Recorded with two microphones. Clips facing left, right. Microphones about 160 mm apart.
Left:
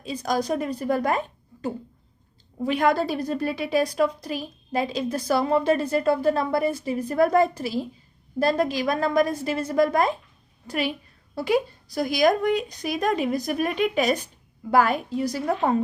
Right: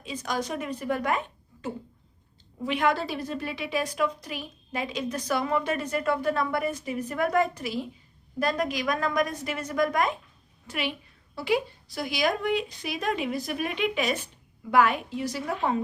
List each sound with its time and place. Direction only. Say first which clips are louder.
0.0 s a woman's voice: left 5 dB; 35° left (ahead or behind)